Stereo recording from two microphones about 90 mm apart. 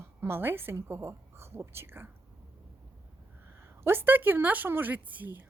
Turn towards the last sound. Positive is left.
turn(degrees=-20)  # may be behind; listen again after turning